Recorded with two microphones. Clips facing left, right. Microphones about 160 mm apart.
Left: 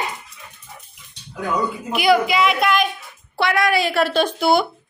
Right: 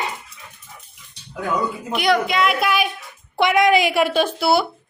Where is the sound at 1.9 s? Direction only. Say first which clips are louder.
Left 2 dB; 5° left (ahead or behind).